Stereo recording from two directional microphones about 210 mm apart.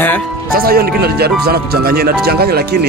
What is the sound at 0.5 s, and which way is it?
Speech, 45° right (ahead or behind).